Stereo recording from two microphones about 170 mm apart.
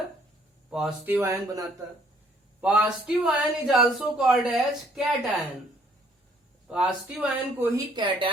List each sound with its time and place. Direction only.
0.7 s speech: centre (ahead or behind)
1.0 s speech: 15° right (ahead or behind)
6.7 s speech: 5° right (ahead or behind)
7.9 s speech: 25° right (ahead or behind)